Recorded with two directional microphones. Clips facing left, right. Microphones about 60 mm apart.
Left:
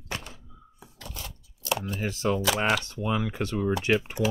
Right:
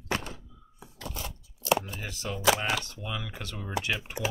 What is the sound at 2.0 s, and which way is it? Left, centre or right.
Speech, left.